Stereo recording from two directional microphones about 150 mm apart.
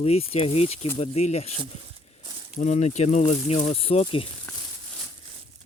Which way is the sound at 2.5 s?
50° left (ahead or behind).